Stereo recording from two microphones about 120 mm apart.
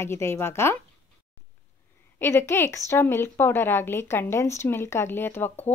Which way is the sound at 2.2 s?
20° left (ahead or behind).